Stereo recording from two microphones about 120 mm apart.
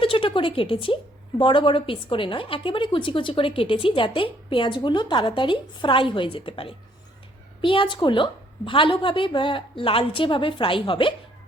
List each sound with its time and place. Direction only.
0.0 s a woman's voice: 50° left (ahead or behind)